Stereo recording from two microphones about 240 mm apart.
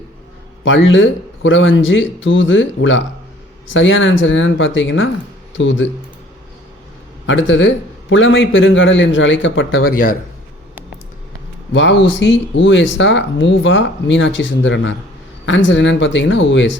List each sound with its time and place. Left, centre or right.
0.6 s speech: left
7.3 s speech: left
11.7 s speech: left